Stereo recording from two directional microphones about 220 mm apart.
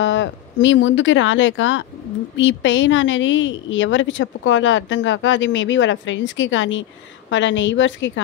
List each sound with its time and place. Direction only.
0.0 s a woman's voice: 55° left (ahead or behind)